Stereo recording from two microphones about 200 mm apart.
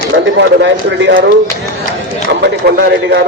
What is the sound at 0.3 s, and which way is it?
Speech, 60° right (ahead or behind).